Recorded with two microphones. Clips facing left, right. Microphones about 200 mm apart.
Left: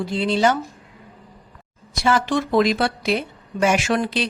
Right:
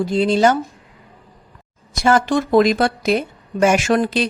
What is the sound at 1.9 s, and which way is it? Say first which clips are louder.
Speech: right 4 dB; 45° right (ahead or behind).